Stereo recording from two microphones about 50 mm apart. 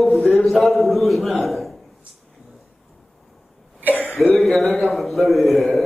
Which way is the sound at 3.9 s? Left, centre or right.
Left.